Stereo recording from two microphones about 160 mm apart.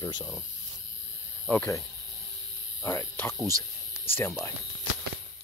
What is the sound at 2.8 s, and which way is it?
Speech, 15° left (ahead or behind).